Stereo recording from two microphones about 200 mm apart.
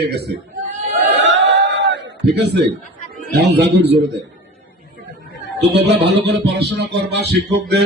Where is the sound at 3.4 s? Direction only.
55° right (ahead or behind).